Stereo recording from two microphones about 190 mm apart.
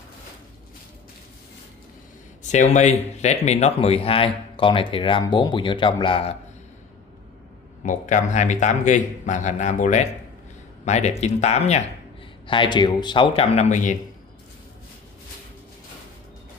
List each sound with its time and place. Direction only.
2.5 s speech: 40° left (ahead or behind)
7.8 s speech: 40° left (ahead or behind)
12.4 s speech: 25° left (ahead or behind)